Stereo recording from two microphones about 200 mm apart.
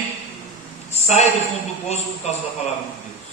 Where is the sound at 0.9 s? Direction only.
35° left (ahead or behind).